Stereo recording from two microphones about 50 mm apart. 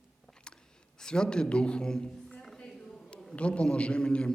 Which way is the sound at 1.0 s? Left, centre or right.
Centre.